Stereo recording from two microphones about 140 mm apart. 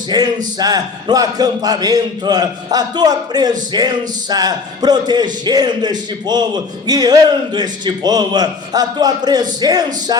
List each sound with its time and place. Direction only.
0.1 s a man's voice: 30° right (ahead or behind)